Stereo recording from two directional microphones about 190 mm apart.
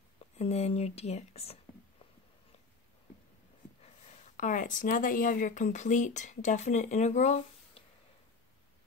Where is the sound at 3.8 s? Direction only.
40° left (ahead or behind).